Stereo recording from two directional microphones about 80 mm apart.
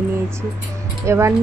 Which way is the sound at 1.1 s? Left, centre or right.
Right.